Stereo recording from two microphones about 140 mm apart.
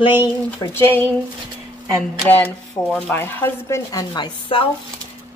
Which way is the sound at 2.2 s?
10° left (ahead or behind).